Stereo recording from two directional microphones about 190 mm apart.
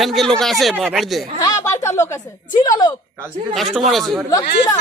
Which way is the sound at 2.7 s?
20° left (ahead or behind).